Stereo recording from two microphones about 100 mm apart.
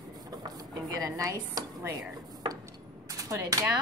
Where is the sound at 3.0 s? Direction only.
35° right (ahead or behind).